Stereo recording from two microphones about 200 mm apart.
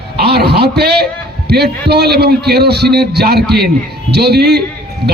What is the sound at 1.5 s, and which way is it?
A man's voice, 55° right (ahead or behind).